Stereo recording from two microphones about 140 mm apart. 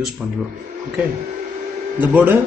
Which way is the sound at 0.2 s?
Centre (ahead or behind).